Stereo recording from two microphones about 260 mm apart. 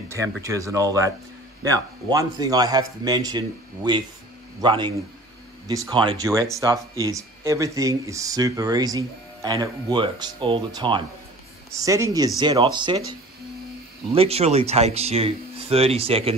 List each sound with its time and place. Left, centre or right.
0.1 s speech: centre
14.1 s speech: right